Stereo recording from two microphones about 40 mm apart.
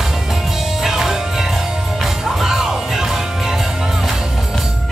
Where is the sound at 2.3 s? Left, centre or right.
Centre.